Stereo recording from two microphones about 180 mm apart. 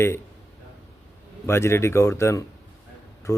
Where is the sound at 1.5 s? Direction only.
15° left (ahead or behind).